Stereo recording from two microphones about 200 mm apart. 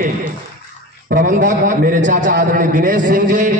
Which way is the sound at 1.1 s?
40° right (ahead or behind).